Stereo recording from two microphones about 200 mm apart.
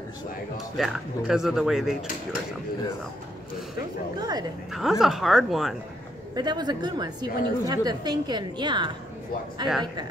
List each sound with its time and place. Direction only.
0.7 s speech: centre (ahead or behind)
4.2 s a woman's voice: 20° right (ahead or behind)
5.0 s speech: centre (ahead or behind)
6.3 s a woman's voice: 20° right (ahead or behind)